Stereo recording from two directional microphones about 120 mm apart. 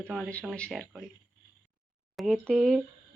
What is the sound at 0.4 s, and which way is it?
Speech, 10° left (ahead or behind).